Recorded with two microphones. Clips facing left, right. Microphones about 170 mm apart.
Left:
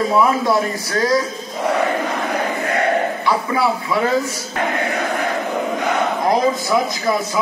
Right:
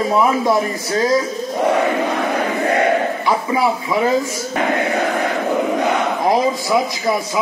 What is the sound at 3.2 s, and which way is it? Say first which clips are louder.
Speech: right 2 dB; 20° right (ahead or behind).